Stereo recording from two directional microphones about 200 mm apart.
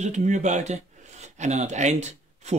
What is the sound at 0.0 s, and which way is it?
Speech, 35° right (ahead or behind).